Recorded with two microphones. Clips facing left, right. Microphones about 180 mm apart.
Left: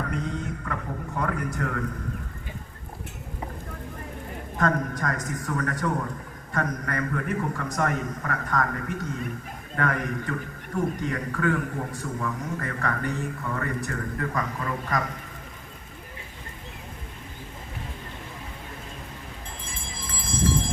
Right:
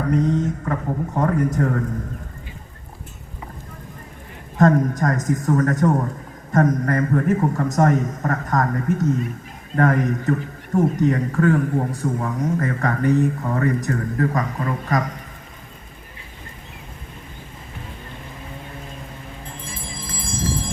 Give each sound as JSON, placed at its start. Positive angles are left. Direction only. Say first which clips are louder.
{"t": 0.1, "sound": "a man's voice", "louder": "right 11 dB", "side_deg": -40}
{"t": 4.5, "sound": "a man's voice", "louder": "right 9 dB", "side_deg": -45}